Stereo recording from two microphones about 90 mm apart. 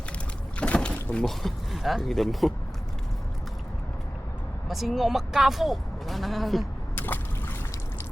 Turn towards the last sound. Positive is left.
turn(degrees=20)  # may be behind; listen again after turning